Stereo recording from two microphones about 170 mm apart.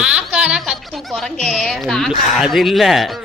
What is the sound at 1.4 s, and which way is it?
Speech, 5° left (ahead or behind).